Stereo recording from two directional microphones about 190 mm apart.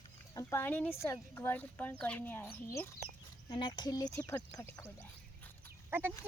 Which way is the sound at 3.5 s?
25° left (ahead or behind).